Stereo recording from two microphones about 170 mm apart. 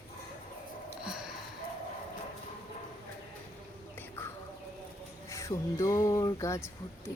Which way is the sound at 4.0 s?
15° left (ahead or behind).